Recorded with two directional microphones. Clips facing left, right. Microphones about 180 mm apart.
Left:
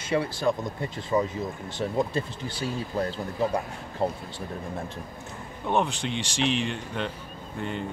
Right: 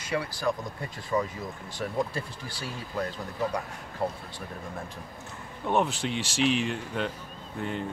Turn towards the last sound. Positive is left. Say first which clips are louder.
# left 1 dB
turn(degrees=0)  # may be behind; listen again after turning